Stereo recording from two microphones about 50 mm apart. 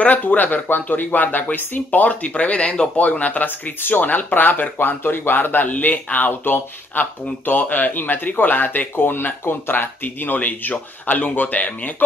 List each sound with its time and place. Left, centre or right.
0.0 s speech: left